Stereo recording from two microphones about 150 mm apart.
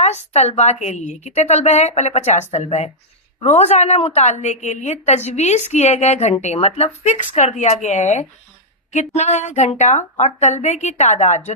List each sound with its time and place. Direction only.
0.3 s a woman's voice: 45° left (ahead or behind)